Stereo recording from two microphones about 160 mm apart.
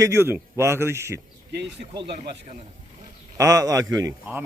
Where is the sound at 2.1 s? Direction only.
80° right.